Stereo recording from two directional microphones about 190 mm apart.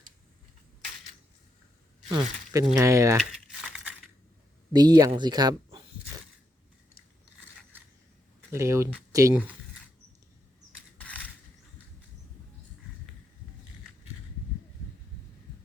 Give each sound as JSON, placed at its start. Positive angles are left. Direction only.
{"t": 2.0, "sound": "speech", "side_deg": -15}
{"t": 3.3, "sound": "crushing", "side_deg": -5}
{"t": 4.7, "sound": "speech", "side_deg": -20}
{"t": 8.5, "sound": "speech", "side_deg": -15}